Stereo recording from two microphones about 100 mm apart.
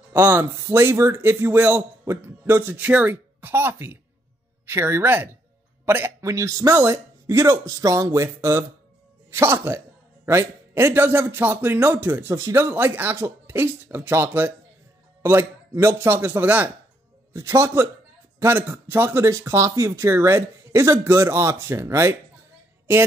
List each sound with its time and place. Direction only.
0.1 s a man's voice: 20° right (ahead or behind)